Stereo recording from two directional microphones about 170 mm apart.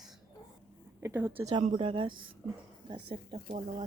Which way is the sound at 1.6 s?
30° right (ahead or behind).